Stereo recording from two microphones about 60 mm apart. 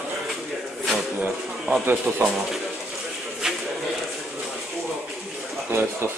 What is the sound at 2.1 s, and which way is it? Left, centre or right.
Speech, right.